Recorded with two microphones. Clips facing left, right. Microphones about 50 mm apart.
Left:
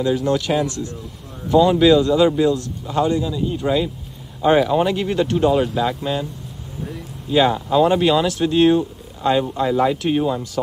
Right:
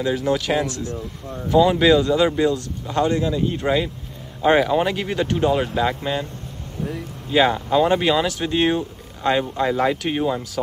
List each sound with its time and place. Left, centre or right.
0.1 s speech: centre
3.1 s speech: right
3.6 s speech: centre